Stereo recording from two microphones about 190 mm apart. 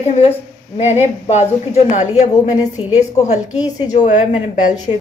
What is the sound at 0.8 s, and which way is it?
A woman's voice, 35° left (ahead or behind).